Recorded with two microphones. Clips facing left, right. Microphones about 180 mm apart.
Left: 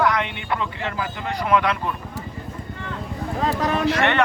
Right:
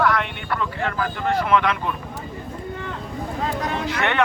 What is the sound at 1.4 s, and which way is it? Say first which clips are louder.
Speech: left 2 dB; 10° left (ahead or behind).